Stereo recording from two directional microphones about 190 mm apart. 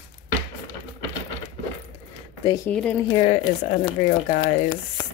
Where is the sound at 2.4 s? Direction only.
20° left (ahead or behind).